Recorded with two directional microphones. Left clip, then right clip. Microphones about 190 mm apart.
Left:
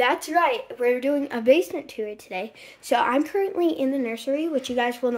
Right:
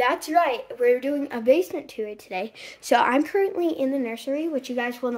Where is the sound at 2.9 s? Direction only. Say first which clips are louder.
Right 1 dB; 15° right (ahead or behind).